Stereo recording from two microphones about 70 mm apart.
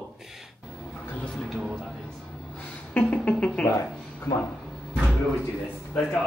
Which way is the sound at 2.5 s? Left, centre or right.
Centre.